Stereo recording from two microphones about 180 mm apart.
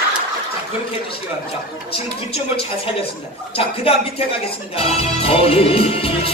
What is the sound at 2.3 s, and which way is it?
Speech, 30° left (ahead or behind).